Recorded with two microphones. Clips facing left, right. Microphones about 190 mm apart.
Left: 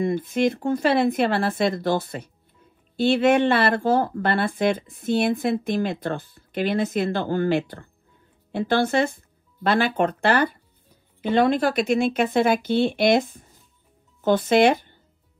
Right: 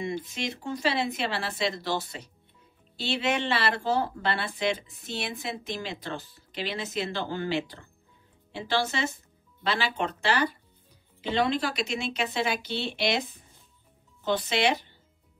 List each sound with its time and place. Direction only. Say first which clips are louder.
0.0 s speech: left 11 dB; 55° left (ahead or behind)